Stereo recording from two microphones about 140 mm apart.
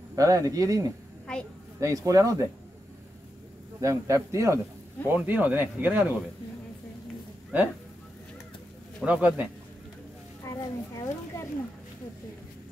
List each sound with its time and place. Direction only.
0.1 s a man's voice: 25° right (ahead or behind)
1.2 s a sound: 5° left (ahead or behind)
1.8 s a man's voice: 25° right (ahead or behind)
3.8 s a man's voice: 20° right (ahead or behind)
9.0 s speech: 10° right (ahead or behind)
10.4 s speech: 20° left (ahead or behind)